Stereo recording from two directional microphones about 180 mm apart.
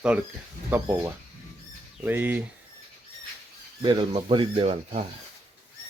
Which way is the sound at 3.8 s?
30° right (ahead or behind).